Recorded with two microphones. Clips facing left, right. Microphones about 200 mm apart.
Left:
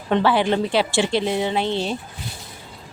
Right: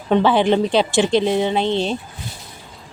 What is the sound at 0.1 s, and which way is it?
A woman's voice, 20° right (ahead or behind).